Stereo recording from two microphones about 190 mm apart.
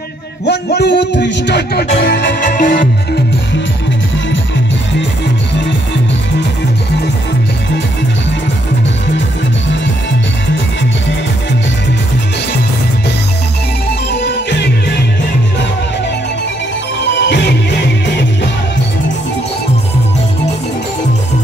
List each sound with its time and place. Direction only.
0.5 s speech: 60° left (ahead or behind)
2.0 s music: 55° left (ahead or behind)
14.1 s music: 65° left (ahead or behind)
17.0 s music: 70° left (ahead or behind)